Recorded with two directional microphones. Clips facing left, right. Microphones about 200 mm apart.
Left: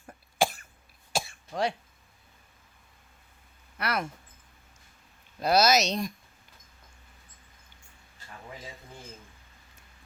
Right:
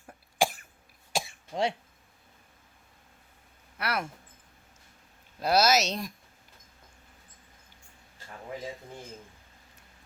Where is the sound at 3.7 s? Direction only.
5° right (ahead or behind).